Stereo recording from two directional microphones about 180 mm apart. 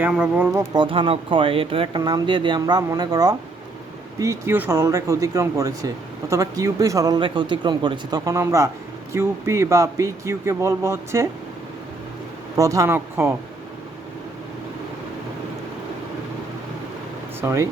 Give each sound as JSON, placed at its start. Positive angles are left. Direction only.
{"t": 0.0, "sound": "speech", "side_deg": -10}
{"t": 0.7, "sound": "speech", "side_deg": -30}
{"t": 12.5, "sound": "speech", "side_deg": -20}
{"t": 17.4, "sound": "speech", "side_deg": -15}